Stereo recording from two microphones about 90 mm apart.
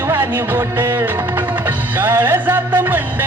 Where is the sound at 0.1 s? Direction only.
25° right (ahead or behind).